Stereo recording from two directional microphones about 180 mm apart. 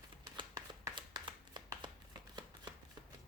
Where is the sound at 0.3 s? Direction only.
25° right (ahead or behind).